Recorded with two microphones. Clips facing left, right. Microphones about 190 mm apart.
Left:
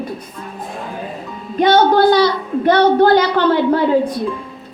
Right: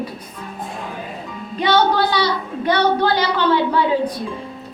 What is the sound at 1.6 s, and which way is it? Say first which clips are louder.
A woman's voice: left 5 dB; 50° left (ahead or behind).